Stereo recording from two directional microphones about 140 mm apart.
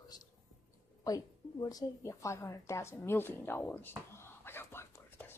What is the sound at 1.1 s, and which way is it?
A woman's voice, 30° left (ahead or behind).